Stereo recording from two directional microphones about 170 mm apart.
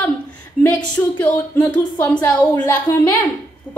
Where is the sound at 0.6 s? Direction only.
5° left (ahead or behind).